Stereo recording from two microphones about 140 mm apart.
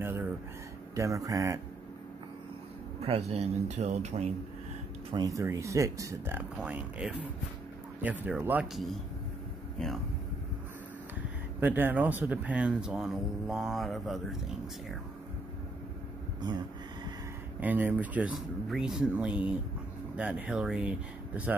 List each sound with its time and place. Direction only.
0.0 s a sound: 15° right (ahead or behind)
0.9 s speech: 25° right (ahead or behind)
3.0 s speech: 50° right (ahead or behind)
5.1 s speech: 25° right (ahead or behind)
11.6 s speech: 15° right (ahead or behind)
17.6 s speech: 15° right (ahead or behind)